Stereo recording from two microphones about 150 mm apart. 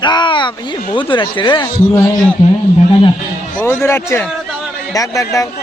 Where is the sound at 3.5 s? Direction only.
15° left (ahead or behind).